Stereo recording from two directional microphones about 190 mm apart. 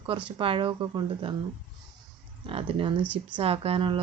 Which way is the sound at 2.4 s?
30° right (ahead or behind).